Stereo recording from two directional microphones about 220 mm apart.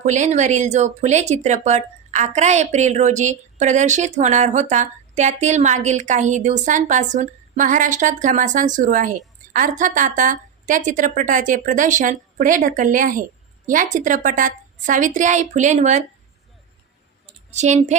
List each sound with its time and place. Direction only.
0.0 s speech: 30° right (ahead or behind)
17.2 s clicking: 30° right (ahead or behind)